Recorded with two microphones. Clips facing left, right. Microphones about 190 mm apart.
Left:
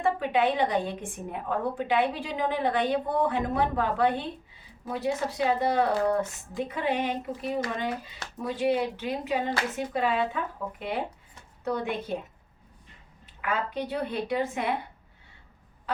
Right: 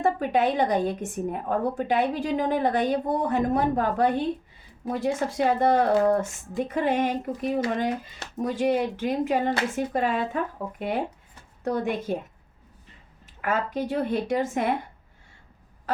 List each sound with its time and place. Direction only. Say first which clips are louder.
0.0 s a woman's voice: right 2 dB; 45° right (ahead or behind)
13.4 s a woman's voice: right 3 dB; 45° right (ahead or behind)